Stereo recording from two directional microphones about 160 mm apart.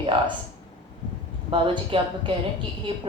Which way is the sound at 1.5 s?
30° right (ahead or behind).